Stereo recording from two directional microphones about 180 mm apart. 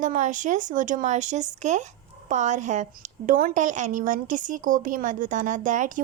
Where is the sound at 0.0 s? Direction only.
45° right (ahead or behind).